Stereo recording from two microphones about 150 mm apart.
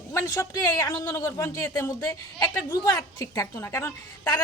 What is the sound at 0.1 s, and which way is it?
A woman's voice, 15° left (ahead or behind).